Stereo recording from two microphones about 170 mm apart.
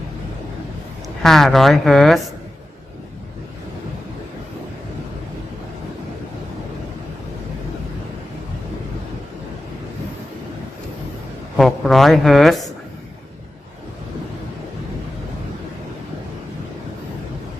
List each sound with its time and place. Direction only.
1.2 s speech: centre (ahead or behind)
11.5 s a woman's voice: centre (ahead or behind)